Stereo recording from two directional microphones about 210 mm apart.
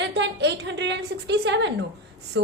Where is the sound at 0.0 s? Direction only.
55° right (ahead or behind).